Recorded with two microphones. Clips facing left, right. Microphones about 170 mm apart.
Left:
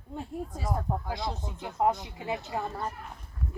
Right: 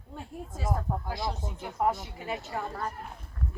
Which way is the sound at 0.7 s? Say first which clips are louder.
Left 1 dB; 20° left (ahead or behind).